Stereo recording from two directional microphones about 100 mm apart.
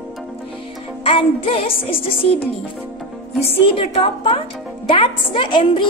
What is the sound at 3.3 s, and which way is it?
A woman's voice, 80° left.